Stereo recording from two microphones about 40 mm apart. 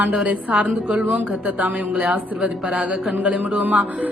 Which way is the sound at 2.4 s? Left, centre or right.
Right.